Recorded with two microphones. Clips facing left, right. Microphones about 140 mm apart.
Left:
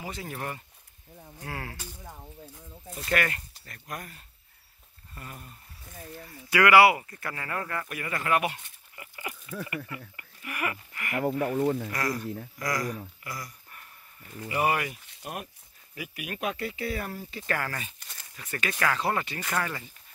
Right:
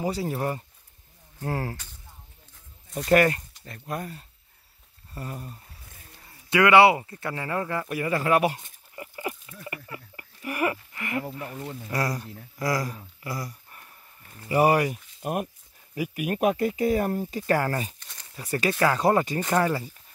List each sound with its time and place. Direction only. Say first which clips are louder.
0.0 s speech: right 9 dB; 35° right (ahead or behind)
2.0 s a sound: left 10 dB; 90° left
3.1 s speech: right 9 dB; 35° right (ahead or behind)
5.1 s speech: right 8 dB; 35° right (ahead or behind)
6.5 s speech: right 2 dB; 25° right (ahead or behind)
11.2 s speech: left 10 dB; 55° left (ahead or behind)
11.9 s speech: right 2 dB; 35° right (ahead or behind)
18.7 s speech: right 5 dB; 25° right (ahead or behind)
18.9 s speech: right 7 dB; 40° right (ahead or behind)